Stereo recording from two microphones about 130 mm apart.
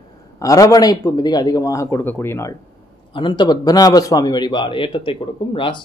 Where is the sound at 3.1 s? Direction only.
35° left (ahead or behind).